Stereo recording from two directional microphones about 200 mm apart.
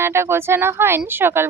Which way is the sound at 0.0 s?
10° right (ahead or behind).